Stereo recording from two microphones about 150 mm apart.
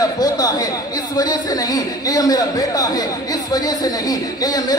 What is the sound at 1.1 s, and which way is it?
Speech, 25° left (ahead or behind).